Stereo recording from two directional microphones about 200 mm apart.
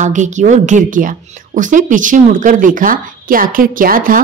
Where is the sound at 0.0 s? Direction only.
40° right (ahead or behind).